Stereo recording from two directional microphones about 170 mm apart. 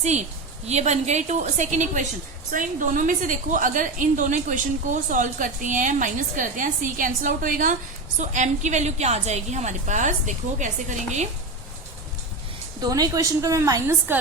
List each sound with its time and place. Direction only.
0.0 s a woman's voice: 40° right (ahead or behind)
12.8 s a woman's voice: 20° right (ahead or behind)